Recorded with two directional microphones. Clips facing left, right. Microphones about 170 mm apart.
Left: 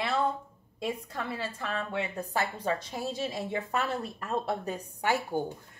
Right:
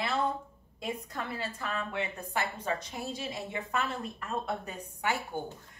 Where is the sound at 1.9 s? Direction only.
30° left (ahead or behind).